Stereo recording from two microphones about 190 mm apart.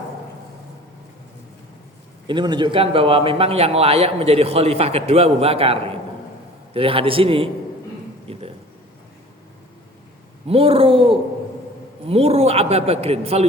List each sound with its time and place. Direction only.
2.2 s a man's voice: 25° right (ahead or behind)
8.3 s a sound: 30° right (ahead or behind)
10.4 s a man's voice: 30° right (ahead or behind)